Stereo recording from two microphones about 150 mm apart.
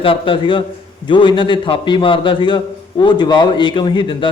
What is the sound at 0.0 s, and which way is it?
A man's voice, 35° left (ahead or behind).